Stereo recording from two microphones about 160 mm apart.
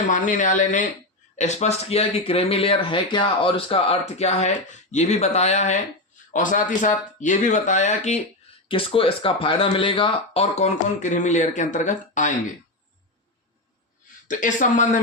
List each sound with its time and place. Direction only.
0.1 s speech: 50° left (ahead or behind)
8.6 s speech: 35° left (ahead or behind)
14.3 s speech: 55° left (ahead or behind)